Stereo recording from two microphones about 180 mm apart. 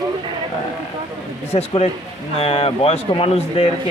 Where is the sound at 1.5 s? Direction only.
35° left (ahead or behind).